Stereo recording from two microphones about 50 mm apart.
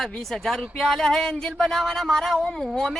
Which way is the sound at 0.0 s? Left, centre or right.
Centre.